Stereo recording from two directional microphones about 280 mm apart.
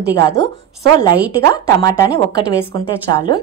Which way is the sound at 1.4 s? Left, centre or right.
Centre.